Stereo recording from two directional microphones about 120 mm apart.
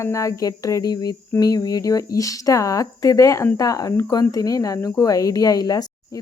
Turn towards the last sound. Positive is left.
turn(degrees=30)  # may be behind; listen again after turning